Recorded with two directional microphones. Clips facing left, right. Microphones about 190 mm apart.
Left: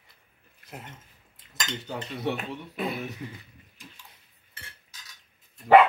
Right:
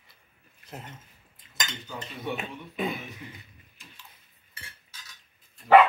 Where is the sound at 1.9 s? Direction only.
70° left (ahead or behind).